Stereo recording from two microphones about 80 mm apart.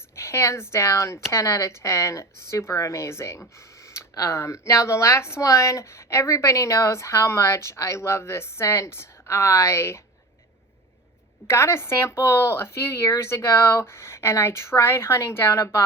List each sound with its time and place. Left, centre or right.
0.2 s speech: left
11.4 s speech: left